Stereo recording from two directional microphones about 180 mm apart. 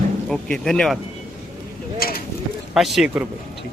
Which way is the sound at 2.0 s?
55° left (ahead or behind).